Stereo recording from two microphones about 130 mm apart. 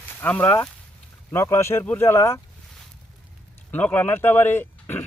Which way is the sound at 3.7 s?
15° left (ahead or behind).